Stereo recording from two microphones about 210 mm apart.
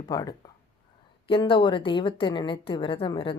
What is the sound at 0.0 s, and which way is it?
A woman's voice, 15° left (ahead or behind).